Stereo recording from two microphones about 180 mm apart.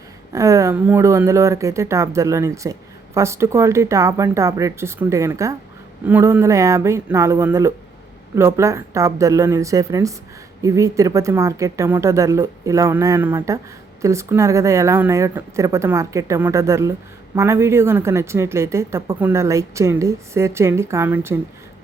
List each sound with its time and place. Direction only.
0.3 s speech: 15° right (ahead or behind)